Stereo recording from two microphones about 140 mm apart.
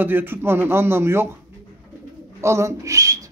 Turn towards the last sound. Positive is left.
turn(degrees=-25)  # may be behind; listen again after turning